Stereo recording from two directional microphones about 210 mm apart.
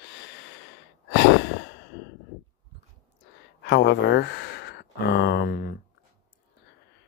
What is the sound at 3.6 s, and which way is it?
Speech, 55° left (ahead or behind).